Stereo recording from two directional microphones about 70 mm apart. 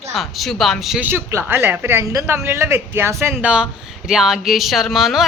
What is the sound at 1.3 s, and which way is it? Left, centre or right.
Speech, right.